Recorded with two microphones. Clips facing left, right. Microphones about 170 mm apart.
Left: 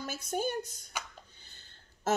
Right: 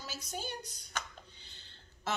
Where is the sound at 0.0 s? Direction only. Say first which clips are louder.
Left 9 dB; 55° left (ahead or behind).